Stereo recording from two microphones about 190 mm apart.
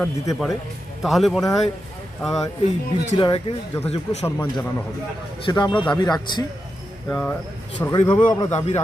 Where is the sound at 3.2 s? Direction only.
25° left (ahead or behind).